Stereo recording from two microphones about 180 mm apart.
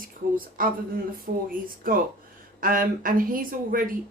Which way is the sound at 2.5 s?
50° right (ahead or behind).